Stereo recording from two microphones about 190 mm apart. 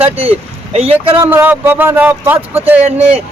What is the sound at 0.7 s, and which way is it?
Speech, 30° right (ahead or behind).